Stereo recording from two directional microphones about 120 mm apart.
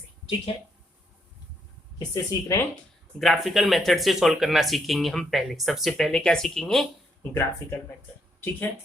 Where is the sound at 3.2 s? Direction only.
Centre (ahead or behind).